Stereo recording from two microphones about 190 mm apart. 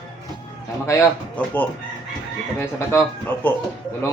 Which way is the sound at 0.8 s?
10° left (ahead or behind).